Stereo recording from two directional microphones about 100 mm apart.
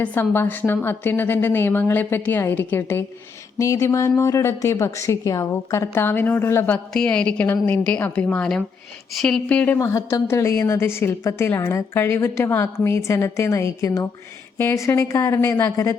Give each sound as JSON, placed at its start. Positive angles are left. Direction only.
{"t": 0.0, "sound": "a woman's voice", "side_deg": 20}
{"t": 3.6, "sound": "a woman's voice", "side_deg": 30}
{"t": 6.9, "sound": "a woman's voice", "side_deg": 10}
{"t": 9.7, "sound": "a woman's voice", "side_deg": 35}